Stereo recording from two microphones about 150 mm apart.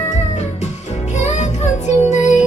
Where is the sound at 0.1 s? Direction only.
50° left (ahead or behind).